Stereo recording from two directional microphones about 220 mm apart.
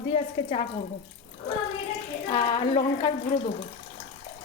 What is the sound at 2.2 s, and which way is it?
Speech, 25° left (ahead or behind).